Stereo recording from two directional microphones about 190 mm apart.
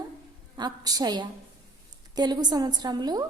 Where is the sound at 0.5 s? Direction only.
20° right (ahead or behind).